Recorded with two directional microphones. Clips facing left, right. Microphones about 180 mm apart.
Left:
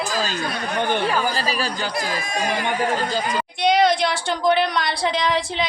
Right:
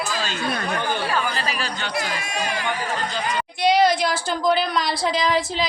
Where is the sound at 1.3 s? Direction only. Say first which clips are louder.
Left 3 dB; 35° left (ahead or behind).